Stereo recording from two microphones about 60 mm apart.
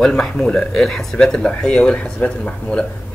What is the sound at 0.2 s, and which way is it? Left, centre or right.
Speech, centre.